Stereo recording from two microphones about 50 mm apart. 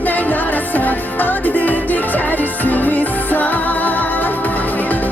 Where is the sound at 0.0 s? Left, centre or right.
Left.